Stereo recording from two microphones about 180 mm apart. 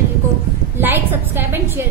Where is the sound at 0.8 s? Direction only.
10° right (ahead or behind).